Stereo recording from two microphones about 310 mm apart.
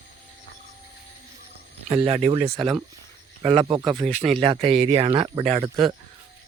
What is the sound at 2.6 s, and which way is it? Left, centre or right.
Speech, centre.